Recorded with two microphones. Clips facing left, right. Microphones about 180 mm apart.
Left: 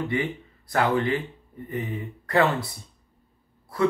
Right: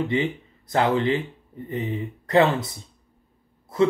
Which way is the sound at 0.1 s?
20° right (ahead or behind).